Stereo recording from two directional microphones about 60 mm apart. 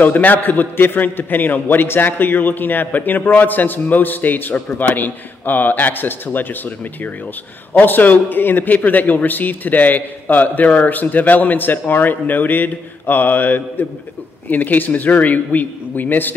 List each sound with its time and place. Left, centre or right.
0.0 s a man's voice: left